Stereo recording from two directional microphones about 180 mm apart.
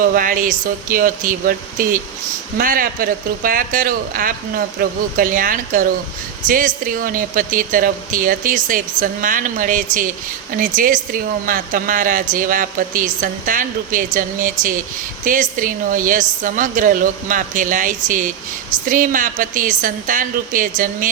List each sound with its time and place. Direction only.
0.0 s a woman's voice: 50° right (ahead or behind)